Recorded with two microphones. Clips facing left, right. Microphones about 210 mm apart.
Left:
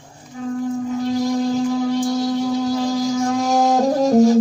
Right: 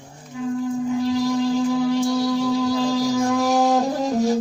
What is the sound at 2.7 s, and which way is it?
Music, 45° left (ahead or behind).